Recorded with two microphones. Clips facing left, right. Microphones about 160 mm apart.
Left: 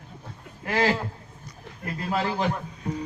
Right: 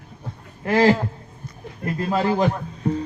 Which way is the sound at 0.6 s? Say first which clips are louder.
Right 7 dB; 35° right (ahead or behind).